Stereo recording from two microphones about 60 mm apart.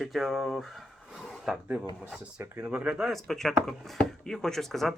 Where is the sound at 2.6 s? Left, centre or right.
Right.